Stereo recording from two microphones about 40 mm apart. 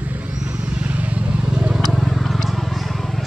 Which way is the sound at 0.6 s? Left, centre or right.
Right.